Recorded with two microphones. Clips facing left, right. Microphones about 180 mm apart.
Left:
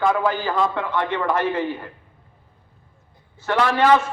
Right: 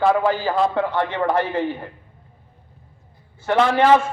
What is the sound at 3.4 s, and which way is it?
Speech, 25° right (ahead or behind).